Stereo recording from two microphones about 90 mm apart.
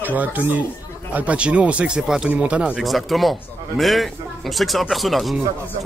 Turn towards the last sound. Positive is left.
turn(degrees=0)  # may be behind; listen again after turning